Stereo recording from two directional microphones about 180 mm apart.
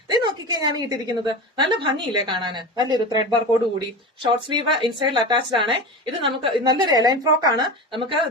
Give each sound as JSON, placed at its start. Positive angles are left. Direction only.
{"t": 0.1, "sound": "speech", "side_deg": -20}